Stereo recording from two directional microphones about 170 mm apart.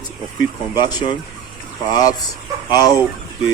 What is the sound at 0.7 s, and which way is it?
A man's voice, 25° left (ahead or behind).